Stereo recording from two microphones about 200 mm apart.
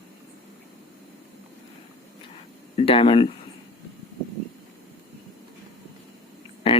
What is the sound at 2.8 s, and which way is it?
Speech, 25° left (ahead or behind).